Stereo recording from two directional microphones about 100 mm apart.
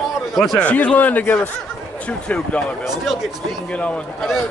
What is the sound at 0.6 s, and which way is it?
Speech, 10° left (ahead or behind).